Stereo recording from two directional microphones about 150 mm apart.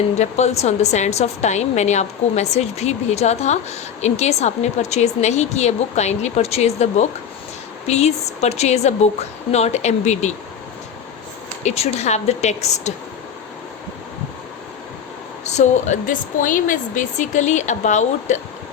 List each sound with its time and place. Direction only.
0.2 s a woman's voice: 50° left (ahead or behind)
11.6 s a woman's voice: 45° left (ahead or behind)
15.4 s a woman's voice: 50° left (ahead or behind)